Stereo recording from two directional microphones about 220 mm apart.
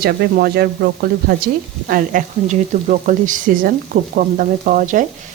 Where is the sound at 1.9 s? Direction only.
35° right (ahead or behind).